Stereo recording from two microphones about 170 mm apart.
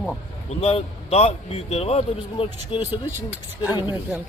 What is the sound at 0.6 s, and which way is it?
A man's voice, 35° left (ahead or behind).